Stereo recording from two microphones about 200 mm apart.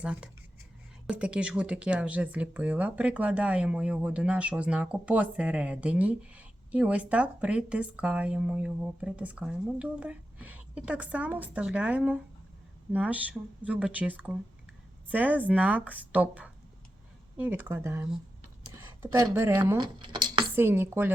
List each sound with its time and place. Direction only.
0.0 s speech: 5° right (ahead or behind)
19.1 s speech: 15° right (ahead or behind)
20.6 s speech: 10° right (ahead or behind)